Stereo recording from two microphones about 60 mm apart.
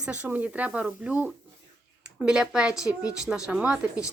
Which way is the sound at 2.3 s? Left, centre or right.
Centre.